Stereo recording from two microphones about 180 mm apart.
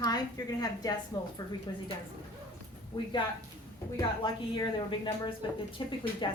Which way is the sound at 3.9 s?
25° left (ahead or behind).